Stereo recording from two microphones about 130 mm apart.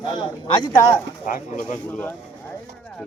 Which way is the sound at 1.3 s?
85° left.